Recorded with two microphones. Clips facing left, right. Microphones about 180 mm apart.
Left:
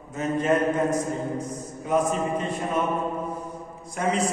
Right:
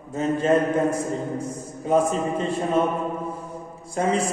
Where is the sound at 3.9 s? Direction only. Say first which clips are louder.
Right 3 dB; 30° right (ahead or behind).